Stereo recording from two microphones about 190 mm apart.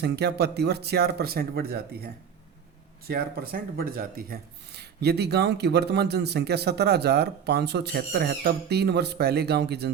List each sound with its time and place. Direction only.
0.0 s speech: 60° right (ahead or behind)
3.1 s speech: 55° right (ahead or behind)